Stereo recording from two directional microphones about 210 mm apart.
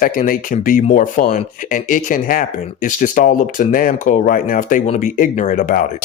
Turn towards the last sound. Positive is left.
turn(degrees=40)  # may be behind; listen again after turning